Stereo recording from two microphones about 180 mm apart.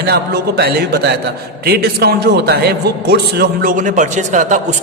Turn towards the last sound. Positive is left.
turn(degrees=-45)  # may be behind; listen again after turning